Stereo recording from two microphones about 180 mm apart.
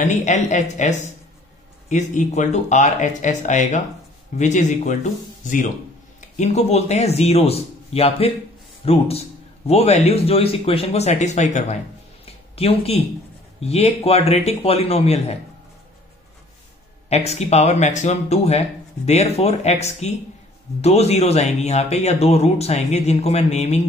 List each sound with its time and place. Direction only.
0.0 s speech: 45° left (ahead or behind)
17.1 s speech: 35° left (ahead or behind)